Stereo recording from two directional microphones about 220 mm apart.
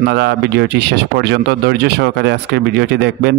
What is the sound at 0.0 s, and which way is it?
Speech, 50° right (ahead or behind).